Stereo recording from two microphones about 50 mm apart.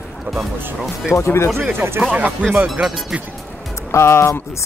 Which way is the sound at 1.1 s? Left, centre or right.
Left.